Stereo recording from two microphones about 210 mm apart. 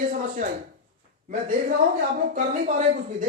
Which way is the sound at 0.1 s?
40° right (ahead or behind).